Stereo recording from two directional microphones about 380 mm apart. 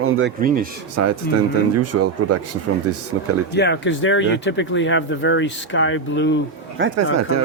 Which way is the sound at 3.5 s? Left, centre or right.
Left.